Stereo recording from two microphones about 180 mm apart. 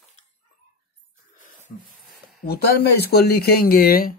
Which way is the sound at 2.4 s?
65° left (ahead or behind).